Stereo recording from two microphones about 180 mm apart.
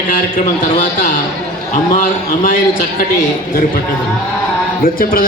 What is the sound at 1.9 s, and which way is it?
Speech, 50° left (ahead or behind).